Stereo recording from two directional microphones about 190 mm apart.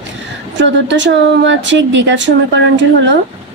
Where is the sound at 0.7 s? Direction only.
70° right (ahead or behind).